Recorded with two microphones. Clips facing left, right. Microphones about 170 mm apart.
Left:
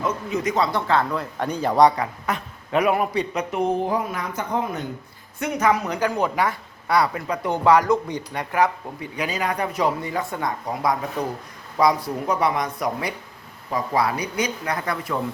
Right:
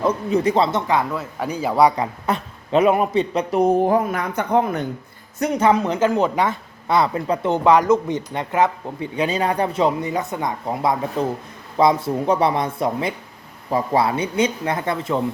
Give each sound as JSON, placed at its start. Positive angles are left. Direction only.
{"t": 0.0, "sound": "speech", "side_deg": -35}
{"t": 1.1, "sound": "speech", "side_deg": -5}
{"t": 2.0, "sound": "speech", "side_deg": -30}
{"t": 3.8, "sound": "a woman's voice", "side_deg": -55}
{"t": 5.4, "sound": "speech", "side_deg": -30}